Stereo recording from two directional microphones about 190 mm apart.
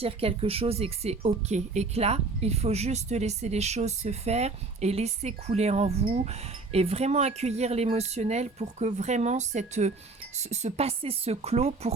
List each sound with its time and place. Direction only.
0.0 s speech: 30° right (ahead or behind)